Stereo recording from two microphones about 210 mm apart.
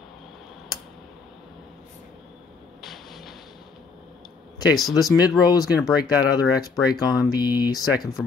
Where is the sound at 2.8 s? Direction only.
Centre (ahead or behind).